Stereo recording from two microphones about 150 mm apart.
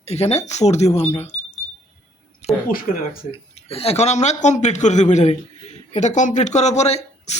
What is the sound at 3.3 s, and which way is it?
Speech, 40° left (ahead or behind).